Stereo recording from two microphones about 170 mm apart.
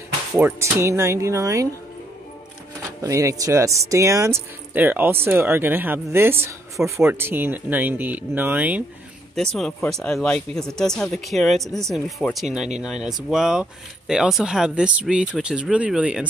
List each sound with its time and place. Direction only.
0.3 s speech: 15° right (ahead or behind)
3.0 s speech: 20° right (ahead or behind)
9.3 s speech: 5° left (ahead or behind)